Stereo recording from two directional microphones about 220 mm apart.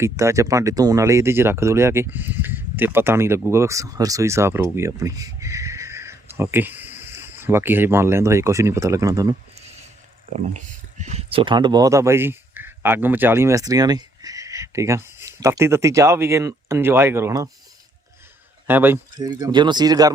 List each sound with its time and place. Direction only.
0.0 s speech: 15° right (ahead or behind)
10.3 s speech: 30° right (ahead or behind); by 17.5 s 15° right (ahead or behind)
18.7 s speech: 10° right (ahead or behind)